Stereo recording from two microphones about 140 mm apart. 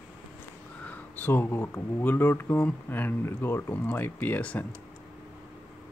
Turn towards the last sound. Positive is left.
turn(degrees=10)  # may be behind; listen again after turning